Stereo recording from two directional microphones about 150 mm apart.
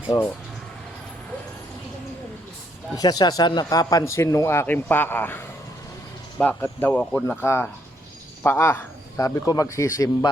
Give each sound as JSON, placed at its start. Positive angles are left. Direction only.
{"t": 0.1, "sound": "speech", "side_deg": 20}
{"t": 2.9, "sound": "speech", "side_deg": 25}
{"t": 6.4, "sound": "speech", "side_deg": 10}